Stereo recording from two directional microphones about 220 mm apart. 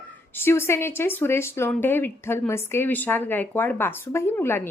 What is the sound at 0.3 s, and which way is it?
Speech, 10° left (ahead or behind).